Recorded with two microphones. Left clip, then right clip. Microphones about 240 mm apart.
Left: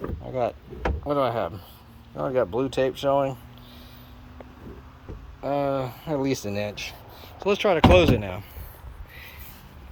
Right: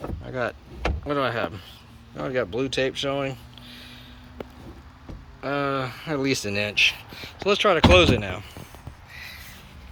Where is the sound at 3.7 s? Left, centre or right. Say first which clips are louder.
Right 8 dB; left.